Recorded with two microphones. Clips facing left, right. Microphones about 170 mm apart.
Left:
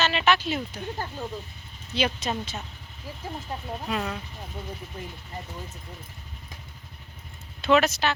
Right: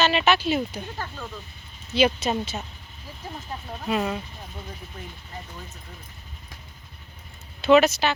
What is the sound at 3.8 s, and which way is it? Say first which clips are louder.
Speech: right 5 dB; 20° right (ahead or behind).